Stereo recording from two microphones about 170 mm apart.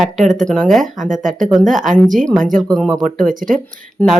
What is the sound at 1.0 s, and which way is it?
Speech, 50° right (ahead or behind).